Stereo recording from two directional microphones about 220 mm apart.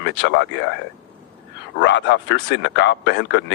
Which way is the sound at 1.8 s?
55° left (ahead or behind).